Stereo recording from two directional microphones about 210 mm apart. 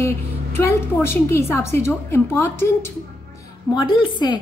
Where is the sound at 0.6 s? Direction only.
10° left (ahead or behind).